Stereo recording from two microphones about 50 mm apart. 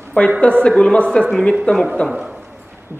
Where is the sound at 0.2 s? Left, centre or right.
Left.